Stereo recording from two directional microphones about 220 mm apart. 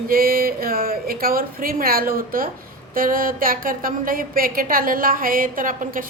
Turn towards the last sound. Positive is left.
turn(degrees=-40)  # may be behind; listen again after turning